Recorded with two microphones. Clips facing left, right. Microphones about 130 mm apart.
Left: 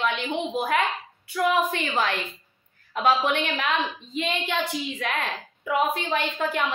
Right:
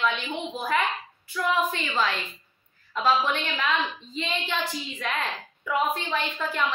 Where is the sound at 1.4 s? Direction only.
65° left (ahead or behind).